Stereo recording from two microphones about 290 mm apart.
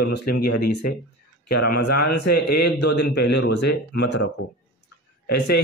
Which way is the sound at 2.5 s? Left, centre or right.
Left.